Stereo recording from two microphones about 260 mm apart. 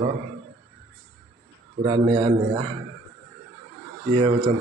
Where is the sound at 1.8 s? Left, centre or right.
Centre.